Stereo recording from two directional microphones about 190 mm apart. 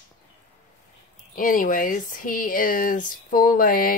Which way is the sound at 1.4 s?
45° left (ahead or behind).